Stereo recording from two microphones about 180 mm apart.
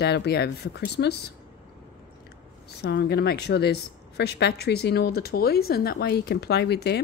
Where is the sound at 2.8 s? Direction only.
65° left (ahead or behind).